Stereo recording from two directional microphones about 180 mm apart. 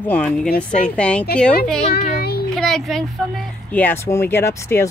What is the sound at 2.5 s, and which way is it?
Speech, centre (ahead or behind).